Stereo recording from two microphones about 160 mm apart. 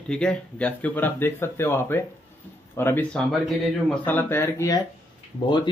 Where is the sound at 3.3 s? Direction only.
Centre (ahead or behind).